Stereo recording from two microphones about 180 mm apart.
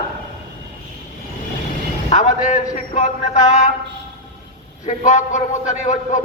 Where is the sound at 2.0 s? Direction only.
40° left (ahead or behind).